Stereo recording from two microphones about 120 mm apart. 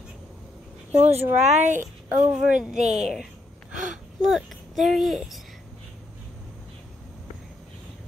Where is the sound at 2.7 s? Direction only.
75° right (ahead or behind).